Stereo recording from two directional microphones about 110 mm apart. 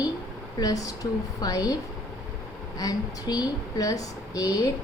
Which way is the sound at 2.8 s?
35° left (ahead or behind).